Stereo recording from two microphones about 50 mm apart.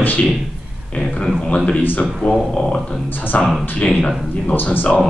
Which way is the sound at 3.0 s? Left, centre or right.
Left.